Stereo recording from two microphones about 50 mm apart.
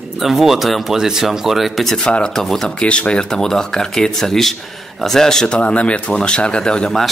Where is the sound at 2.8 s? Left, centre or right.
Left.